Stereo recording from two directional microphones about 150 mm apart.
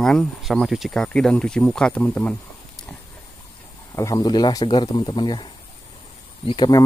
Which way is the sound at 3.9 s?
20° left (ahead or behind).